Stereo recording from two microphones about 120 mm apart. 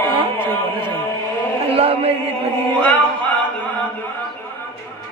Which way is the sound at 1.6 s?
55° right (ahead or behind).